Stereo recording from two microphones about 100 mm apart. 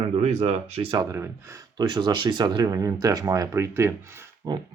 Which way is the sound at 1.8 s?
45° right (ahead or behind).